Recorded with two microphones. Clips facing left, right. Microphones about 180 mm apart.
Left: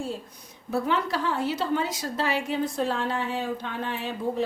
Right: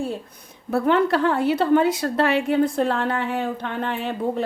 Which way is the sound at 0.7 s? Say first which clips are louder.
Right 7 dB; 60° right (ahead or behind).